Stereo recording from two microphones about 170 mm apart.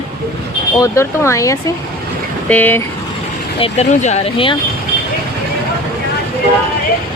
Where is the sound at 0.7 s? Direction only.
20° left (ahead or behind).